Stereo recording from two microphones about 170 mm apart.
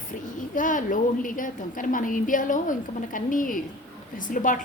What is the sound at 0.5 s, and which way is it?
A woman's voice, 50° left (ahead or behind).